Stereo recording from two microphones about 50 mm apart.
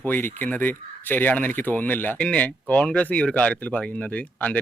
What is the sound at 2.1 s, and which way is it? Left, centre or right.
Speech, left.